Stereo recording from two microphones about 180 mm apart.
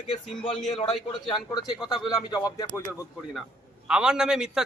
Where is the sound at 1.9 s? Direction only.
25° left (ahead or behind).